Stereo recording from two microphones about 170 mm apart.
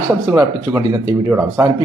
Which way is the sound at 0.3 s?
20° right (ahead or behind).